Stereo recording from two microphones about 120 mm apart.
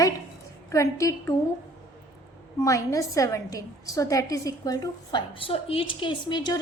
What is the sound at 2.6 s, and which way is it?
A woman's voice, 25° left (ahead or behind).